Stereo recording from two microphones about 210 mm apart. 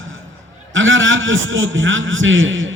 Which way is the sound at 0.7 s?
65° right (ahead or behind).